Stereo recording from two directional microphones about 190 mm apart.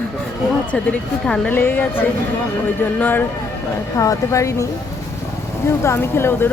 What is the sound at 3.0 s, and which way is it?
Speech, 10° left (ahead or behind).